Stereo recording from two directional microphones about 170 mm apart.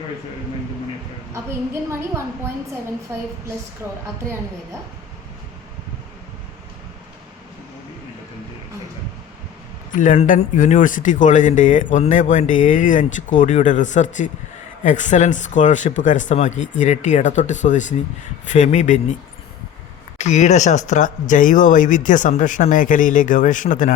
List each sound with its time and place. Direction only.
1.3 s a woman's voice: 15° right (ahead or behind)
9.9 s speech: 50° left (ahead or behind)
20.1 s speech: 40° left (ahead or behind)